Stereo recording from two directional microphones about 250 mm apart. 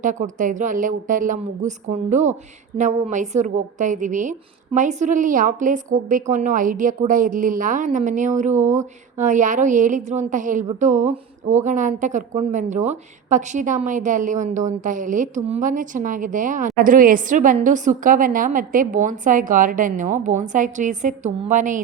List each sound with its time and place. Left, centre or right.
0.0 s a woman's voice: right